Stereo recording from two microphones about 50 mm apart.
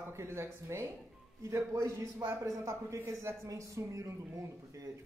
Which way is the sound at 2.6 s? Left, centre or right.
Right.